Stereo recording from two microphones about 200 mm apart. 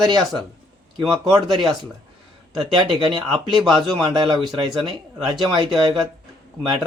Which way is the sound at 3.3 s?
Centre (ahead or behind).